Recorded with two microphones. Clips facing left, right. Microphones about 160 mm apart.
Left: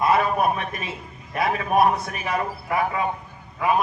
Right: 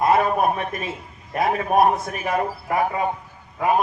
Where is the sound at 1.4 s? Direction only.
45° right (ahead or behind).